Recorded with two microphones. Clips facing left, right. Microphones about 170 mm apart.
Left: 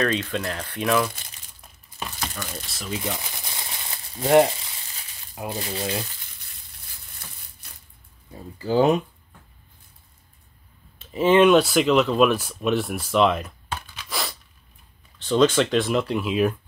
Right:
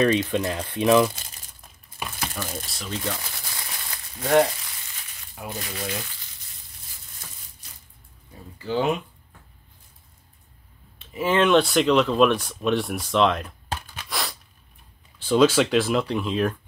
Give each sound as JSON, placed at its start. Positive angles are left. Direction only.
{"t": 0.0, "sound": "speech", "side_deg": -15}
{"t": 2.0, "sound": "speech", "side_deg": -10}
{"t": 3.0, "sound": "speech", "side_deg": 15}
{"t": 4.2, "sound": "speech", "side_deg": 25}
{"t": 5.5, "sound": "speech", "side_deg": 30}
{"t": 7.6, "sound": "a sound", "side_deg": 60}
{"t": 8.5, "sound": "speech", "side_deg": 40}
{"t": 11.1, "sound": "speech", "side_deg": 15}
{"t": 14.0, "sound": "a sound", "side_deg": 0}
{"t": 15.1, "sound": "speech", "side_deg": -5}